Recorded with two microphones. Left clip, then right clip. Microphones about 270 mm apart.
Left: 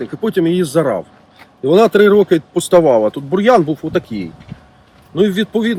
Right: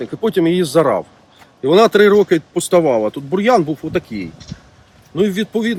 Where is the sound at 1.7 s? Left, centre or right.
Centre.